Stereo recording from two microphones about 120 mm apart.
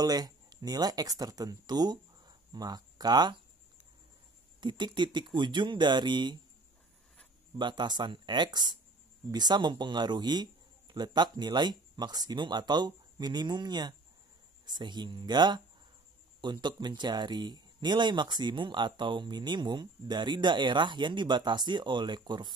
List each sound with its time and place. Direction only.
0.0 s speech: 35° right (ahead or behind)
4.6 s speech: 40° right (ahead or behind)
7.5 s speech: 40° right (ahead or behind)